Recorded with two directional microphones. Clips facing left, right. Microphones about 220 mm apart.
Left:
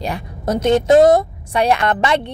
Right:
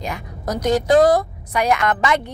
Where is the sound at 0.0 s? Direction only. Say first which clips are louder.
Left 4 dB; 30° left (ahead or behind).